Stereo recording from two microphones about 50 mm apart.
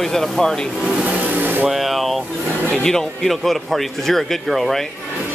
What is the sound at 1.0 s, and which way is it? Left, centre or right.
Vehicle, right.